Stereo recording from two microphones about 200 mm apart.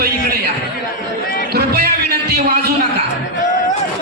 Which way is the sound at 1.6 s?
50° right (ahead or behind).